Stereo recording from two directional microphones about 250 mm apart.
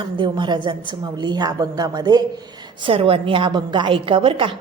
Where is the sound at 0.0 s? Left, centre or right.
Centre.